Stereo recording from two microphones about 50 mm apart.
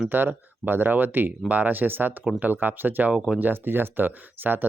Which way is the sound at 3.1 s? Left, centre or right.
Right.